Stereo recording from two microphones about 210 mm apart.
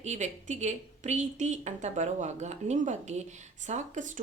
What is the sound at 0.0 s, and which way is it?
A woman's voice, 35° right (ahead or behind).